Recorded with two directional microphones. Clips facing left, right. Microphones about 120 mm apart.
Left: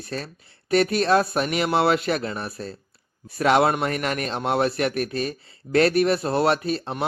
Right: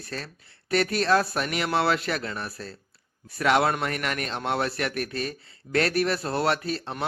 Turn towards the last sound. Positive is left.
turn(degrees=20)  # may be behind; listen again after turning